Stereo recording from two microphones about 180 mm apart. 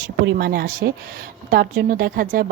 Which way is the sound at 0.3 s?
55° right (ahead or behind).